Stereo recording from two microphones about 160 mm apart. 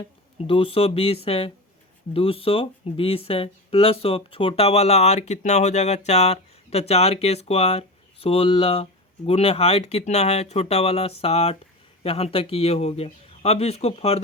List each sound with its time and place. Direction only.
0.3 s speech: 35° left (ahead or behind)